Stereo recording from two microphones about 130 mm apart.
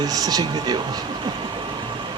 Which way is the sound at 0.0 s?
30° right (ahead or behind).